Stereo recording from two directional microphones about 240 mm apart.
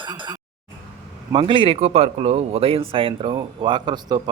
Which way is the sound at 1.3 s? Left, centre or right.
Right.